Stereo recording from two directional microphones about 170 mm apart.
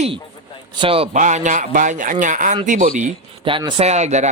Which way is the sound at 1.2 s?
50° right (ahead or behind).